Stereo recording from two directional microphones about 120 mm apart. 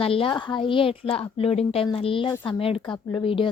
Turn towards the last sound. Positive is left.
turn(degrees=45)  # may be behind; listen again after turning